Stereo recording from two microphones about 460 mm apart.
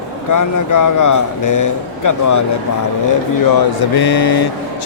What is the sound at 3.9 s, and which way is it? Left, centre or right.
Speech, left.